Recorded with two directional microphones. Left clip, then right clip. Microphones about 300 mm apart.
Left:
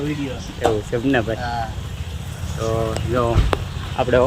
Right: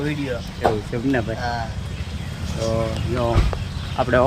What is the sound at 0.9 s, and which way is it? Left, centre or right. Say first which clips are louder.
Speech: left 3 dB; centre.